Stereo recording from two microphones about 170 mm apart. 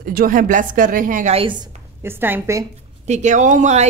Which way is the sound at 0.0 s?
55° right (ahead or behind).